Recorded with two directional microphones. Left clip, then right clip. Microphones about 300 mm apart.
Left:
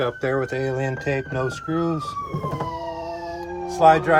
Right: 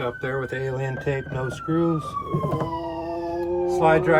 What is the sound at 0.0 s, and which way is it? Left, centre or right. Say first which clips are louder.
Speech: left 4 dB; left.